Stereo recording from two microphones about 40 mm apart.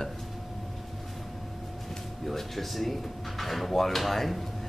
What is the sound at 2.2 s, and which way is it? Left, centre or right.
Speech, centre.